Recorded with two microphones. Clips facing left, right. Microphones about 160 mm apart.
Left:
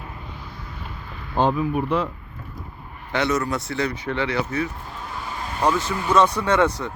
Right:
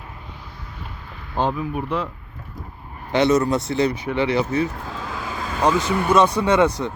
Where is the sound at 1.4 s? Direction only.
35° left (ahead or behind).